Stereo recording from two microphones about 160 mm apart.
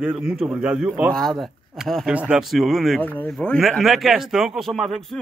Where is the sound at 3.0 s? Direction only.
10° left (ahead or behind).